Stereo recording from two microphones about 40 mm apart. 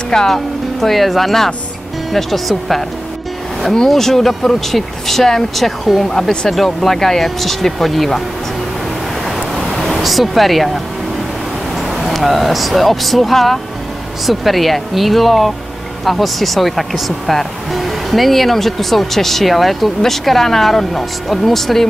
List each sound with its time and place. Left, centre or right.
0.3 s speech: centre
9.2 s a sound: centre
11.9 s speech: centre